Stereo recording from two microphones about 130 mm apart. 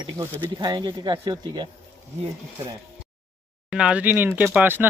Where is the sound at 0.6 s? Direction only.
35° right (ahead or behind).